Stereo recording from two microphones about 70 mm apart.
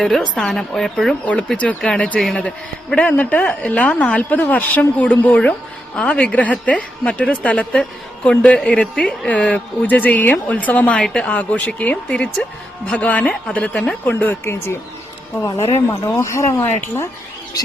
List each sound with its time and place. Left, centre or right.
0.0 s a woman's voice: centre
1.2 s a woman's voice: centre
16.2 s speech: left
16.6 s speech: left